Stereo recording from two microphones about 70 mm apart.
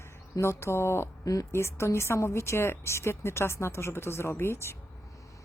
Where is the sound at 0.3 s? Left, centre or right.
Left.